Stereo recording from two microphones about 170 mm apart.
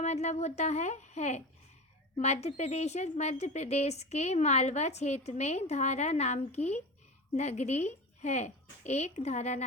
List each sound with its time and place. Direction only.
0.0 s a woman's voice: 40° left (ahead or behind)